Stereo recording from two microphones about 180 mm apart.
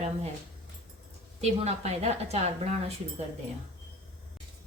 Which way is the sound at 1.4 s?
35° right (ahead or behind).